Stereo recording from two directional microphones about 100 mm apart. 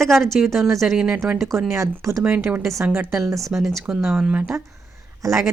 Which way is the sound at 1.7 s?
30° right (ahead or behind).